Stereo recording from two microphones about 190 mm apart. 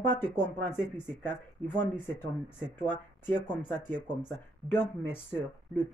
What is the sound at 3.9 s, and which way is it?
Speech, 20° right (ahead or behind).